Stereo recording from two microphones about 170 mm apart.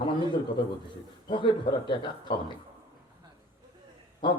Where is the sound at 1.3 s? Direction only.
30° left (ahead or behind).